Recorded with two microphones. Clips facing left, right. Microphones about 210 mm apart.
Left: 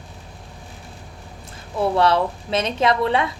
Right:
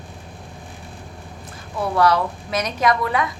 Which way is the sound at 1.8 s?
25° left (ahead or behind).